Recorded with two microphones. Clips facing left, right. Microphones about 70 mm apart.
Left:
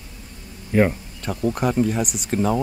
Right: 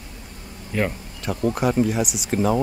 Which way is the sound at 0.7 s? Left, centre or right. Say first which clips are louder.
Left 6 dB; centre.